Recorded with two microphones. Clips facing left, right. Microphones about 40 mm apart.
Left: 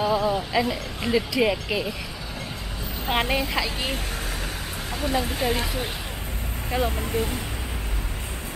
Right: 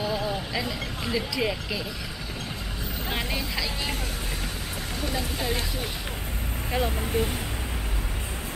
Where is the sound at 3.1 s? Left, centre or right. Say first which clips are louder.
Left 8 dB; left.